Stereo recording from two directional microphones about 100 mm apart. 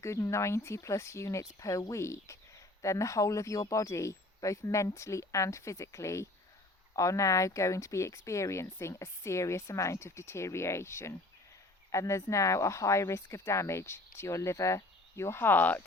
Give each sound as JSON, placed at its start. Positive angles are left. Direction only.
{"t": 0.0, "sound": "speech", "side_deg": 30}